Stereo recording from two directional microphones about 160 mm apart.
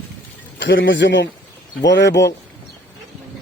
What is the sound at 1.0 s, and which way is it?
Speech, 90° left.